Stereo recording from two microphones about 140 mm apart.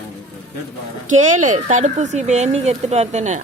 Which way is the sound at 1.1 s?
60° right (ahead or behind).